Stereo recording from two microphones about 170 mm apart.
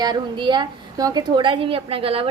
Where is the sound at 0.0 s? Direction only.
25° right (ahead or behind).